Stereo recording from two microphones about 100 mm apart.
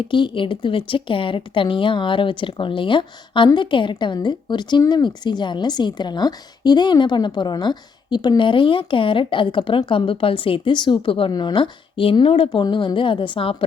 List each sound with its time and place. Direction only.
0.1 s a woman's voice: 55° left (ahead or behind)
11.3 s speech: 45° left (ahead or behind); by 12.5 s 65° left (ahead or behind)
12.5 s speech: 50° left (ahead or behind)